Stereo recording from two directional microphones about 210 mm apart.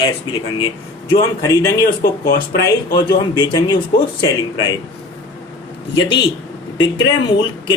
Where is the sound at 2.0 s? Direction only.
45° left (ahead or behind).